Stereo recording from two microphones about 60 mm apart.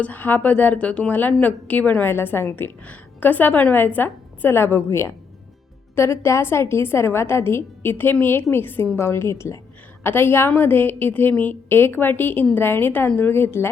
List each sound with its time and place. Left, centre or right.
0.0 s a woman's voice: left
2.0 s a woman's voice: left
2.8 s a woman's voice: left
9.0 s a woman's voice: left
10.0 s a woman's voice: left